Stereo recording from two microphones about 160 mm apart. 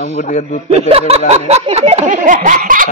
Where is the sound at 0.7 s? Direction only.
40° right (ahead or behind); by 2.9 s 60° right (ahead or behind).